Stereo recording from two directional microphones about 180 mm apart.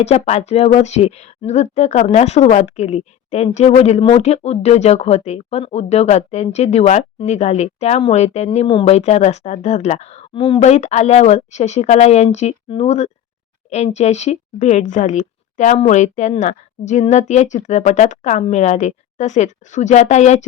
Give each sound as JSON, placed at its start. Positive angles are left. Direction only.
{"t": 0.0, "sound": "speech", "side_deg": 35}